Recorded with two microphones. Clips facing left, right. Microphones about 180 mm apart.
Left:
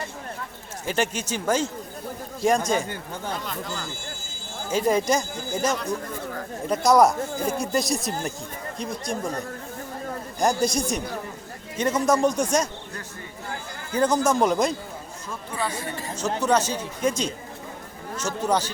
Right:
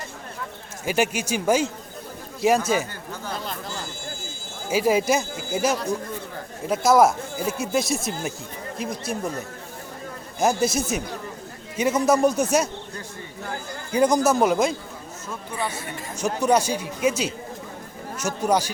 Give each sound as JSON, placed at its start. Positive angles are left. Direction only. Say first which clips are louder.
{"t": 0.9, "sound": "speech", "louder": "right 3 dB", "side_deg": -10}
{"t": 4.7, "sound": "speech", "louder": "right 1 dB", "side_deg": -5}
{"t": 10.4, "sound": "speech", "louder": "right 1 dB", "side_deg": -5}
{"t": 13.9, "sound": "speech", "louder": "right 2 dB", "side_deg": -10}
{"t": 15.5, "sound": "speech", "louder": "even", "side_deg": -20}
{"t": 16.4, "sound": "speech", "louder": "right 2 dB", "side_deg": -10}